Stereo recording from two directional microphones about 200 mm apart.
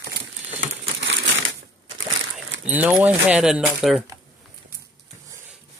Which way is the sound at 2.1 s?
70° right (ahead or behind).